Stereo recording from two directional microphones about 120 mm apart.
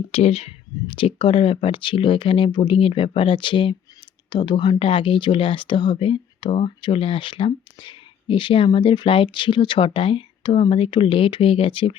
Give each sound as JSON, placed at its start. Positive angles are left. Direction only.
{"t": 0.1, "sound": "speech", "side_deg": 60}